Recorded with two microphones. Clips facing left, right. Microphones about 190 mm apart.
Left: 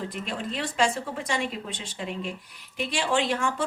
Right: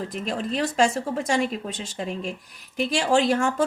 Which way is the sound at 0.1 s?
40° right (ahead or behind).